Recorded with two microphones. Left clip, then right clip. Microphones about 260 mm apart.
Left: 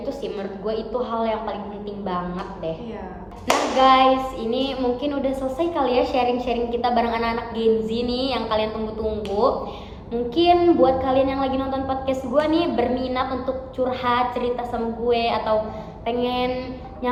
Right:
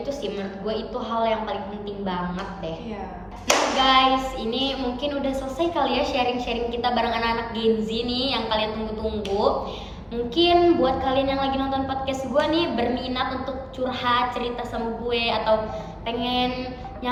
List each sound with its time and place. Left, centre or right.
1.2 s a woman's voice: centre
3.4 s a woman's voice: centre
10.3 s a woman's voice: centre